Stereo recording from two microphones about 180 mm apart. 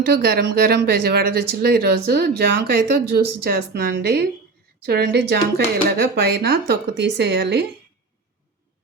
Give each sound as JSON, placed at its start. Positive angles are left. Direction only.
{"t": 0.1, "sound": "speech", "side_deg": -65}